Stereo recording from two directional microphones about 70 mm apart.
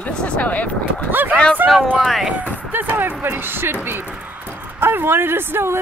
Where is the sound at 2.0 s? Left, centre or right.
Centre.